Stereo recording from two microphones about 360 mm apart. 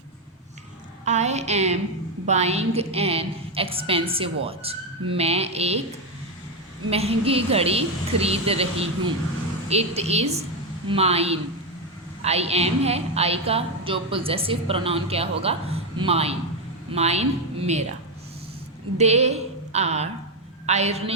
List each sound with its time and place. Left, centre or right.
1.0 s a woman's voice: centre
6.9 s a woman's voice: centre
18.9 s a sound: centre
20.7 s a woman's voice: centre